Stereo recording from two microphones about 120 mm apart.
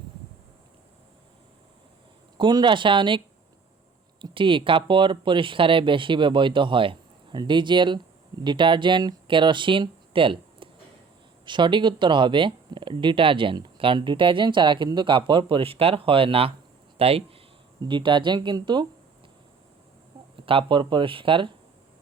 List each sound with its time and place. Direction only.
2.4 s speech: 40° right (ahead or behind)
4.2 s speech: 45° right (ahead or behind)
17.7 s speech: 40° right (ahead or behind)
20.3 s speech: 45° right (ahead or behind)